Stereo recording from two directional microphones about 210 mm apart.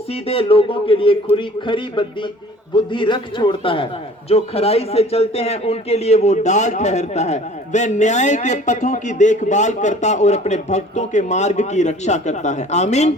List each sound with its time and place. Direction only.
0.1 s a man's voice: 25° left (ahead or behind)